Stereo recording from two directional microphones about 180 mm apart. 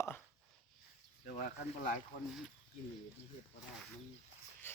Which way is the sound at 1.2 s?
50° left (ahead or behind).